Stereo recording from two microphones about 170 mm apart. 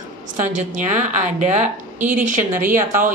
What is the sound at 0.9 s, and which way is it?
A woman's voice, 45° right (ahead or behind).